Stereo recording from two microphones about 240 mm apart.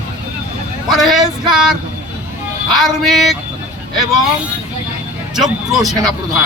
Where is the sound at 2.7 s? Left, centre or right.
Centre.